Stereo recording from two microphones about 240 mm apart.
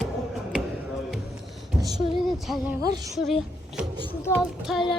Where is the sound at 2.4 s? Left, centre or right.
Centre.